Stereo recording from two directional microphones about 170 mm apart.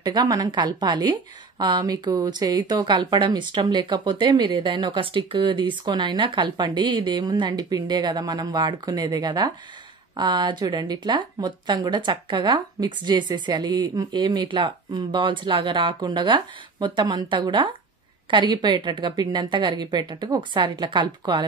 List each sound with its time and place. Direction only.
0.0 s a woman's voice: 25° right (ahead or behind)